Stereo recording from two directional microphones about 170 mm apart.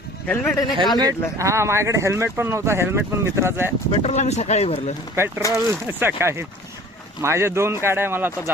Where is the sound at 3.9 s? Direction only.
40° left (ahead or behind).